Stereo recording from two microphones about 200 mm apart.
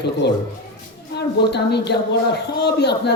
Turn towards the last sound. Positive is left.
turn(degrees=55)  # may be behind; listen again after turning